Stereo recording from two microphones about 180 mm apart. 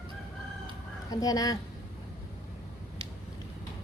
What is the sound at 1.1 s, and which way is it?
Speech, 20° left (ahead or behind).